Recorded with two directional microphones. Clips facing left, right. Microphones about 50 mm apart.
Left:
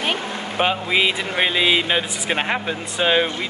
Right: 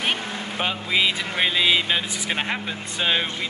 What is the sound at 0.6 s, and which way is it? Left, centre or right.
Speech, centre.